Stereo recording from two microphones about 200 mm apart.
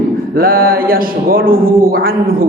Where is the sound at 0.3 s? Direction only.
45° right (ahead or behind).